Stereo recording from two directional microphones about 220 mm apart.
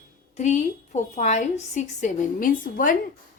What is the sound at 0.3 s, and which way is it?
A woman's voice, 30° left (ahead or behind).